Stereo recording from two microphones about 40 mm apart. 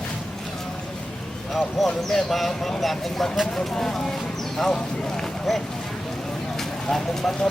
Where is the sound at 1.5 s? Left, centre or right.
Centre.